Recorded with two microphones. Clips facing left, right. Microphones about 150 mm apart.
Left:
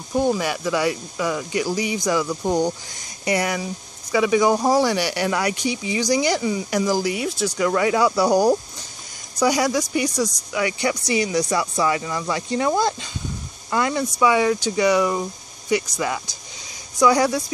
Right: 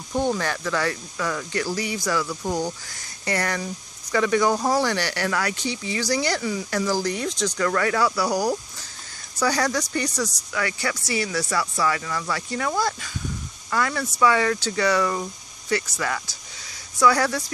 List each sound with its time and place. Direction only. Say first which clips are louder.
0.1 s speech: left 3 dB; 10° left (ahead or behind)
3.3 s speech: left 4 dB; 10° left (ahead or behind)
9.4 s speech: left 4 dB; 15° left (ahead or behind)